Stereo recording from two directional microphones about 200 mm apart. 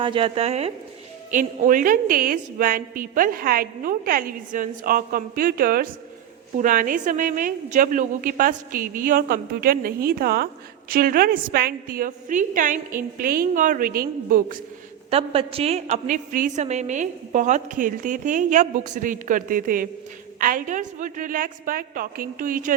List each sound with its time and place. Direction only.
0.0 s speech: 25° right (ahead or behind)
1.3 s a woman's voice: 40° right (ahead or behind)
15.1 s a woman's voice: 30° right (ahead or behind)